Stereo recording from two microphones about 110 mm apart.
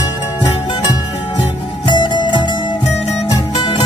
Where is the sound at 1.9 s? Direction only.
45° left (ahead or behind).